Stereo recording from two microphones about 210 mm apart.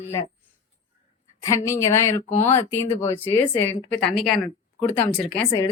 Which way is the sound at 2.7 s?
10° left (ahead or behind).